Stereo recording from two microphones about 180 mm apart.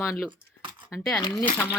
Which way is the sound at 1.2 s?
20° left (ahead or behind).